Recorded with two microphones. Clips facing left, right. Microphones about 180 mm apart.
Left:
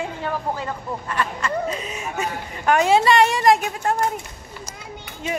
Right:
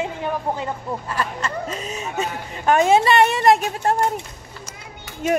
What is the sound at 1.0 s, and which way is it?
Speech, 35° right (ahead or behind).